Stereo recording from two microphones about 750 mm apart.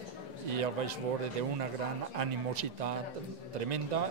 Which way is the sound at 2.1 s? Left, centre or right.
Right.